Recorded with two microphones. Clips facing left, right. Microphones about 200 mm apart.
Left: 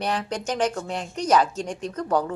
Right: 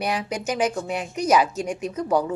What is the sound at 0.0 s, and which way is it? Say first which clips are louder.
A woman's voice: right 1 dB; 10° right (ahead or behind).